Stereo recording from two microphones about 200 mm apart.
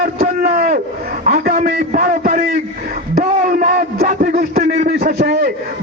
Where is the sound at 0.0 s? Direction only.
50° right (ahead or behind).